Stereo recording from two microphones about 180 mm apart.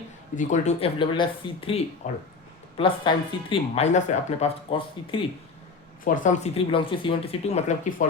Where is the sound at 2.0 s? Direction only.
45° left (ahead or behind).